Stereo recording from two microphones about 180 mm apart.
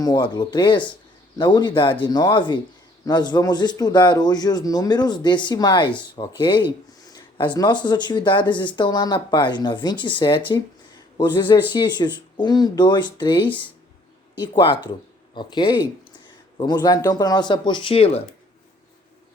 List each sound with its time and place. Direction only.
0.0 s speech: 25° left (ahead or behind)